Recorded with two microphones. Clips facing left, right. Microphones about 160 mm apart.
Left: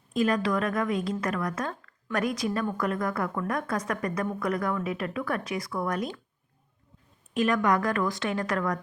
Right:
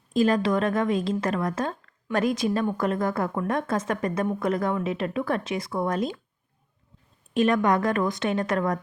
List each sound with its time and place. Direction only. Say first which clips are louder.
0.1 s a woman's voice: right 4 dB; 30° right (ahead or behind)
7.3 s a woman's voice: right 3 dB; 25° right (ahead or behind)